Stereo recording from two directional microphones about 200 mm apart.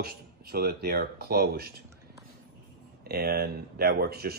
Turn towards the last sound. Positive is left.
turn(degrees=-50)  # may be behind; listen again after turning